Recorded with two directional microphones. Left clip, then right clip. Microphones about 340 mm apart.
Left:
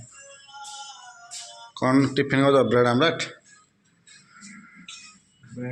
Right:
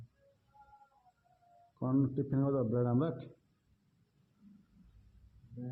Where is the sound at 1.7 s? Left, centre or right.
Centre.